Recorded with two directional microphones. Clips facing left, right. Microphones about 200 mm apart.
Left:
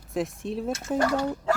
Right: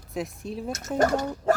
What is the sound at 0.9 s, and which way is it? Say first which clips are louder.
Speech: right 2 dB; 45° right (ahead or behind).